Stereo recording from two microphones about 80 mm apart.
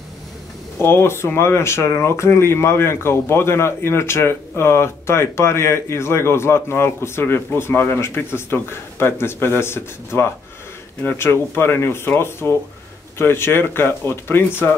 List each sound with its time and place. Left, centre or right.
0.7 s speech: left